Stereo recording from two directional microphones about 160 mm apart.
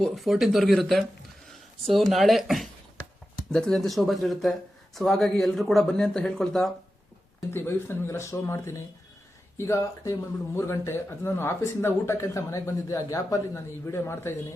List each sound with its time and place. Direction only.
0.0 s speech: centre (ahead or behind)
7.5 s speech: 15° left (ahead or behind)